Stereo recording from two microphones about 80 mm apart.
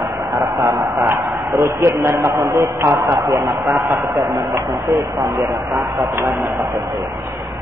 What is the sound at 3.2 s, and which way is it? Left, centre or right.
Speech, right.